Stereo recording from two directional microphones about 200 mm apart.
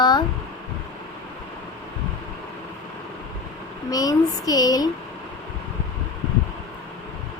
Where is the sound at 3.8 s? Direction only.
15° left (ahead or behind).